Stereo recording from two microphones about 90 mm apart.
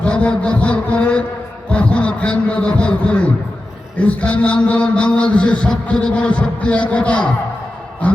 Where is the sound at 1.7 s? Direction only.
15° left (ahead or behind).